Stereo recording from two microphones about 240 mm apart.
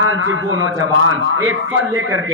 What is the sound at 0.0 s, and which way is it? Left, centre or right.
A man's voice, right.